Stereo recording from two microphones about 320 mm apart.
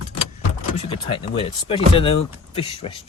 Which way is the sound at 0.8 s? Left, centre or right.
Centre.